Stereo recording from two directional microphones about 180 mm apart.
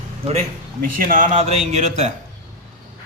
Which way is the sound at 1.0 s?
45° right (ahead or behind).